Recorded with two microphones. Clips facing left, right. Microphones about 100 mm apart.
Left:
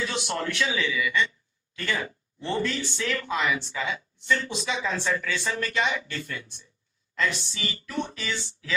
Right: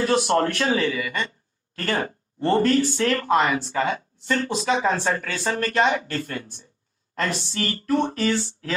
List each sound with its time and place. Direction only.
0.0 s a man's voice: 50° right (ahead or behind)